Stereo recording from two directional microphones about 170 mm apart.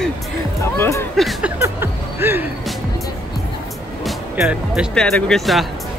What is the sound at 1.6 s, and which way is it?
Music, 15° right (ahead or behind).